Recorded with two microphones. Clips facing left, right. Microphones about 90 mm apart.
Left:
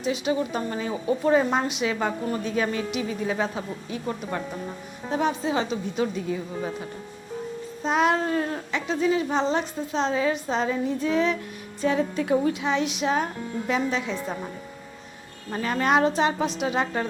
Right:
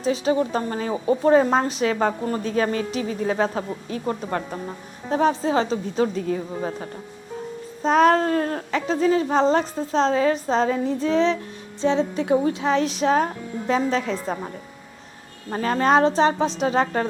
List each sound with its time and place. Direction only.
0.0 s a woman's voice: 35° right (ahead or behind)